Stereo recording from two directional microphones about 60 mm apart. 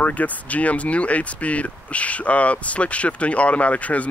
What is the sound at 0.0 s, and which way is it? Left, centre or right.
Speech, left.